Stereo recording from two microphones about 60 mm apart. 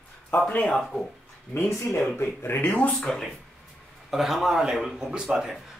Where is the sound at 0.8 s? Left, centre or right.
Centre.